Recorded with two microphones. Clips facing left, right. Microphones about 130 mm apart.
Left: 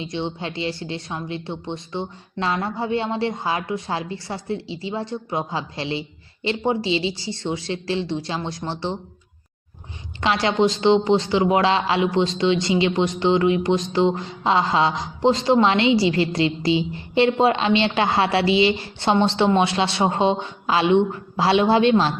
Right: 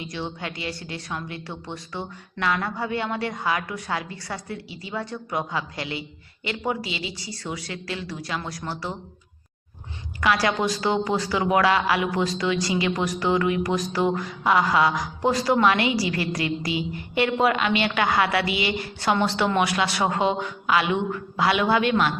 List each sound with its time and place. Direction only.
0.0 s a man's voice: 25° left (ahead or behind)
10.2 s a man's voice: 25° left (ahead or behind)